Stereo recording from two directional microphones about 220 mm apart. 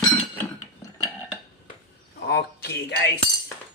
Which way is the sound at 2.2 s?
50° left (ahead or behind).